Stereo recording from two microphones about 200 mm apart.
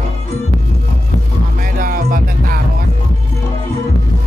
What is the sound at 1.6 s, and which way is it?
Music, 45° right (ahead or behind).